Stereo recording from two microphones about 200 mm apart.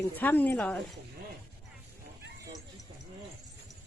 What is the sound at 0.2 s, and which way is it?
Speech, 10° left (ahead or behind).